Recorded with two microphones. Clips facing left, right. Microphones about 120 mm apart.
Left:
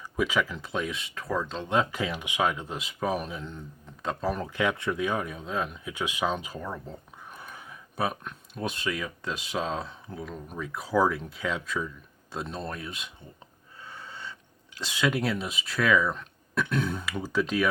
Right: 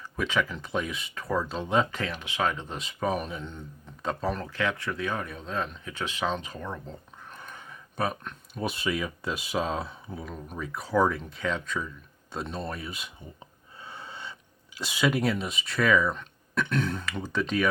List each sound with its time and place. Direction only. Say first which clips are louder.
0.0 s speech: left 1 dB; 10° left (ahead or behind)
4.4 s speech: left 2 dB; 15° left (ahead or behind); by 13.1 s 5° right (ahead or behind)
13.8 s a sound: right 1 dB; 20° right (ahead or behind)
14.8 s speech: right 1 dB; 10° right (ahead or behind)